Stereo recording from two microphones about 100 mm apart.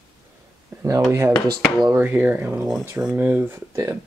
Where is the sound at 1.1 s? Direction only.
30° right (ahead or behind).